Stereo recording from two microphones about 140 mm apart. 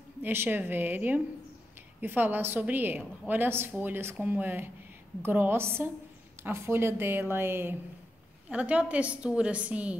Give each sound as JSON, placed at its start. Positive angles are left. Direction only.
{"t": 0.2, "sound": "a woman's voice", "side_deg": -15}